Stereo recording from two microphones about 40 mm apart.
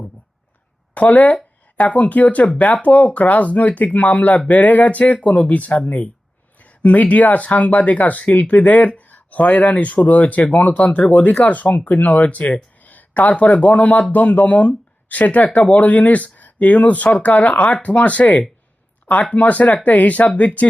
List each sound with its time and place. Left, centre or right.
0.9 s speech: left